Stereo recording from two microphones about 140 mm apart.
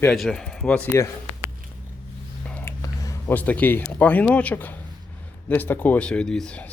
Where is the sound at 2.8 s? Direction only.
25° left (ahead or behind).